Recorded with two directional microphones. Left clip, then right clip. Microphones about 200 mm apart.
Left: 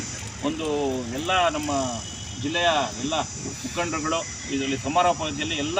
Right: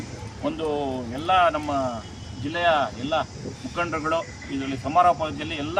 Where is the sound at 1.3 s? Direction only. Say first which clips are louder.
Right 3 dB; 20° right (ahead or behind).